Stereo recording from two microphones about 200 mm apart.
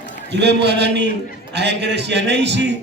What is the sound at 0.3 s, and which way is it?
A man's voice, 60° right (ahead or behind).